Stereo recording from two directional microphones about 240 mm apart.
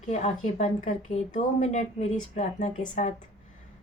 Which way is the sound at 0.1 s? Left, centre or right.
Left.